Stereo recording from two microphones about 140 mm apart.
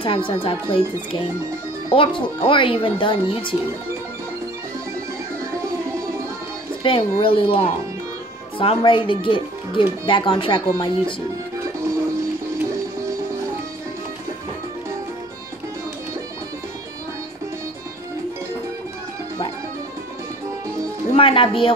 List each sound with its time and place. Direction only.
0.0 s speech: 40° left (ahead or behind)
1.9 s speech: 40° left (ahead or behind)
6.8 s speech: 40° left (ahead or behind)
21.1 s music: 40° left (ahead or behind)